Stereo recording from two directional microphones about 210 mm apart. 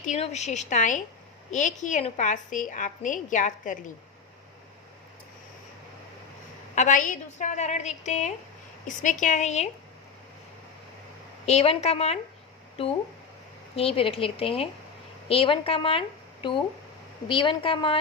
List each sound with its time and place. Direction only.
0.0 s a woman's voice: 35° left (ahead or behind)
6.7 s a woman's voice: 40° left (ahead or behind)
11.4 s a woman's voice: 30° left (ahead or behind)
13.7 s a woman's voice: 25° left (ahead or behind)